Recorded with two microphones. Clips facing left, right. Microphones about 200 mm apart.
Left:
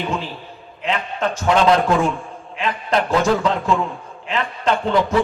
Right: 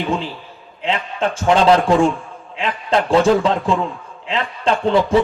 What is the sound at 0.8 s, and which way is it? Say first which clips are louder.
Speech: right 2 dB; 30° right (ahead or behind).